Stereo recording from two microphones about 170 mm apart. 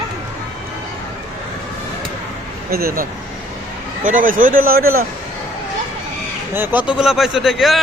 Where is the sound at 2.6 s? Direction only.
65° right (ahead or behind).